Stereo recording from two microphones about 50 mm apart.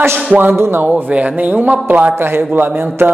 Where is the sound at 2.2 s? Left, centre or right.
Right.